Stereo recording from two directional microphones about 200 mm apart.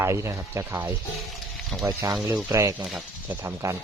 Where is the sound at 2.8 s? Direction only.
5° right (ahead or behind).